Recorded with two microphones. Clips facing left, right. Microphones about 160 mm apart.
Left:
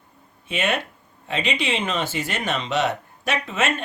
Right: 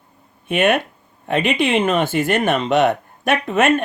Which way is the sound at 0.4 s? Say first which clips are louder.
Right 8 dB; 55° right (ahead or behind).